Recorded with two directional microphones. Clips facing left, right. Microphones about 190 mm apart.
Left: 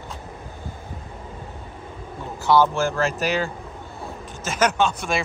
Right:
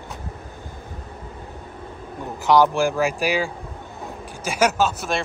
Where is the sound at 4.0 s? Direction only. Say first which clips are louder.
Right 1 dB; 10° right (ahead or behind).